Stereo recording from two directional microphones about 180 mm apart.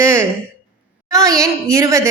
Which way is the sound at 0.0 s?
15° right (ahead or behind).